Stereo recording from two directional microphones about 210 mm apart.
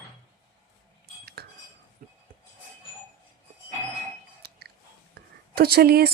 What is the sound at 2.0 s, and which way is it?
Rub, 40° right (ahead or behind).